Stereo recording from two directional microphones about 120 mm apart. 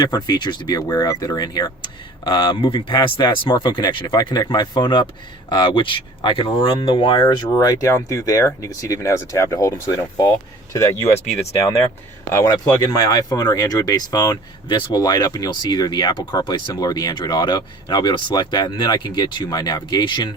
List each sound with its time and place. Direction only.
0.0 s speech: 35° left (ahead or behind)
12.3 s speech: 30° left (ahead or behind)